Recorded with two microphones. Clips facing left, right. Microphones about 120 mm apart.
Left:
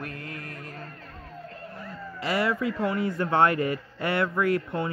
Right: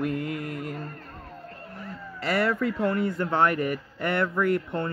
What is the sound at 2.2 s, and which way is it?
Speech, 10° left (ahead or behind).